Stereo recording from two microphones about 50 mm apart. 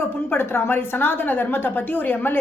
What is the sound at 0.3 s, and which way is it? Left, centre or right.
A woman's voice, left.